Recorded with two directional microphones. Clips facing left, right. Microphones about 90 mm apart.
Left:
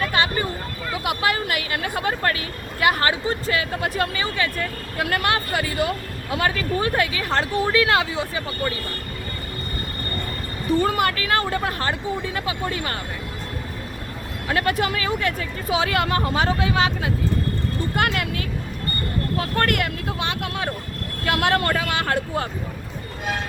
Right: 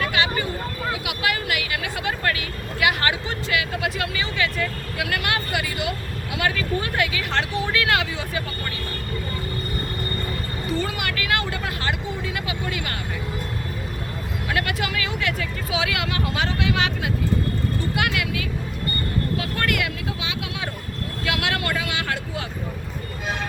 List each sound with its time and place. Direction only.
0.0 s a sound: 35° left (ahead or behind)
1.0 s speech: 35° left (ahead or behind)
10.8 s speech: 40° left (ahead or behind)
14.4 s speech: 35° left (ahead or behind)
17.9 s speech: 45° left (ahead or behind)
19.4 s speech: 45° left (ahead or behind)